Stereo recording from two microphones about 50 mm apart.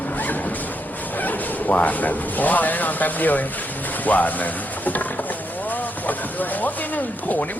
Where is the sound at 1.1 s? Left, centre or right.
Left.